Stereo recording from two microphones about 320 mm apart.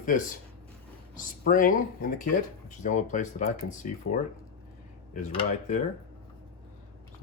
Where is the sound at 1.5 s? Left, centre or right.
Left.